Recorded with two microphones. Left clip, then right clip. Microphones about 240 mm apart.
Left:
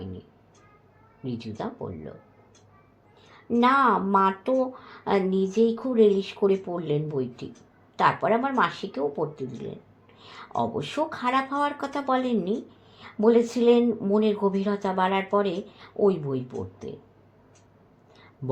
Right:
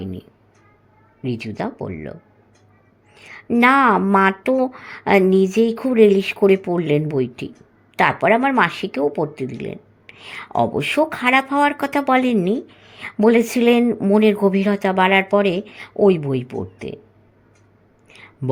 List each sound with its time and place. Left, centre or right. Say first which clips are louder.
1.2 s speech: right 8 dB; right
3.5 s speech: right 6 dB; right